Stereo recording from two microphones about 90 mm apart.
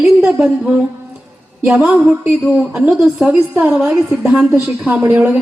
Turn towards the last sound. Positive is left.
turn(degrees=-20)  # may be behind; listen again after turning